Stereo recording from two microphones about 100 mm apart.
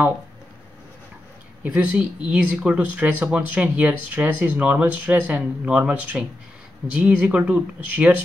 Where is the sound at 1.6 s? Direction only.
10° right (ahead or behind).